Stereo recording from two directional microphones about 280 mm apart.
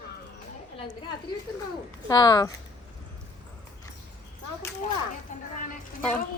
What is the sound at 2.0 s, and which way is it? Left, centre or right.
Speech, centre.